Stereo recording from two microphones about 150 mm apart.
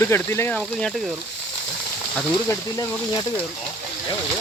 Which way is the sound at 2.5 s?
25° left (ahead or behind).